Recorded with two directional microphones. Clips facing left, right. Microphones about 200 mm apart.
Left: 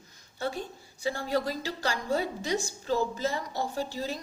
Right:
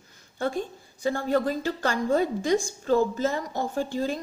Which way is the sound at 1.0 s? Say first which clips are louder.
Right 5 dB; 45° right (ahead or behind).